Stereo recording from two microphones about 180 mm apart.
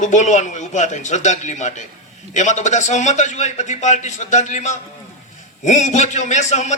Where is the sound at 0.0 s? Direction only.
40° left (ahead or behind).